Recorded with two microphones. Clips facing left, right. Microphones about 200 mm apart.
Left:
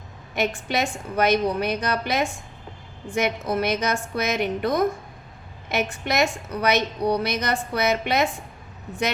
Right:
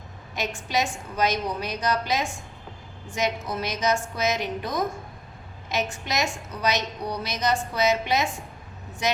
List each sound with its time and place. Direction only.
0.3 s a woman's voice: 60° left (ahead or behind)